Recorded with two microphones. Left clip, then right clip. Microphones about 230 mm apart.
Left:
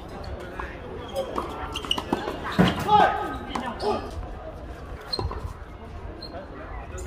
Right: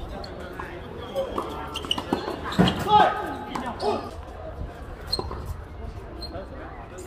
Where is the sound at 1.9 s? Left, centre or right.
Centre.